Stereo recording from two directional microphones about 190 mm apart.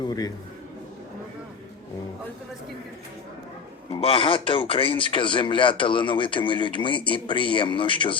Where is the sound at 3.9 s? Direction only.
30° left (ahead or behind).